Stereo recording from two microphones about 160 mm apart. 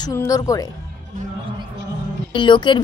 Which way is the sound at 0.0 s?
20° left (ahead or behind).